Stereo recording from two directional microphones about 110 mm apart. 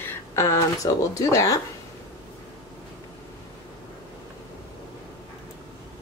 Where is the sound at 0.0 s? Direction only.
20° left (ahead or behind).